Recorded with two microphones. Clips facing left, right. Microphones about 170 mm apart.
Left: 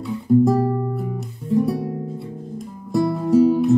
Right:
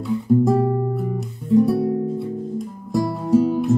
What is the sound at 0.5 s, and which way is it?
Guitar, 25° right (ahead or behind).